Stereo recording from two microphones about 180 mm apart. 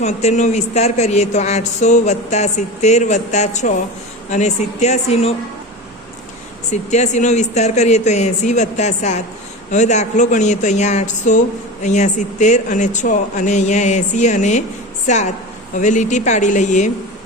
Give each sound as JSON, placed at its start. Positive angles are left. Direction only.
{"t": 0.0, "sound": "a woman's voice", "side_deg": 40}
{"t": 6.9, "sound": "a woman's voice", "side_deg": 40}